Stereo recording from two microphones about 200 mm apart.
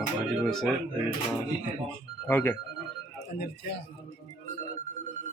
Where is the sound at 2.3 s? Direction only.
10° left (ahead or behind).